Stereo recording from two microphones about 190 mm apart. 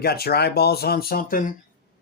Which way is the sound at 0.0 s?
55° left (ahead or behind).